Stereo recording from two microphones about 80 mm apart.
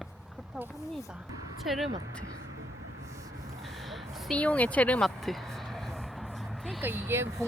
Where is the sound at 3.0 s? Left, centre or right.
Right.